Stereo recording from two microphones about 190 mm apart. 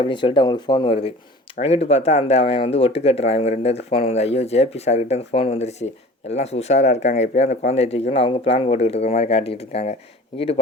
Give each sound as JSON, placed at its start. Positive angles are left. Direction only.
{"t": 0.0, "sound": "speech", "side_deg": 25}